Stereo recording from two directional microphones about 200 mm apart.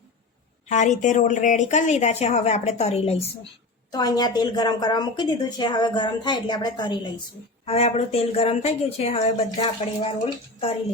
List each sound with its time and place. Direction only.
0.7 s speech: 35° left (ahead or behind)
3.9 s a woman's voice: 20° left (ahead or behind)